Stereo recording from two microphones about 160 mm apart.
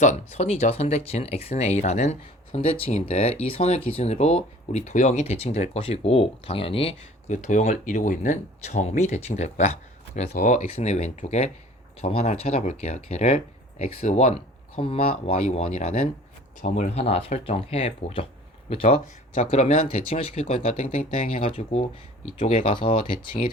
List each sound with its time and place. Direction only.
0.0 s speech: 45° left (ahead or behind)
16.6 s speech: 55° left (ahead or behind); by 22.9 s 35° left (ahead or behind)
23.4 s speech: 45° left (ahead or behind)